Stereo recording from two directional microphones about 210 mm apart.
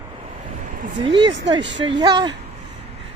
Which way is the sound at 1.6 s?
60° right (ahead or behind).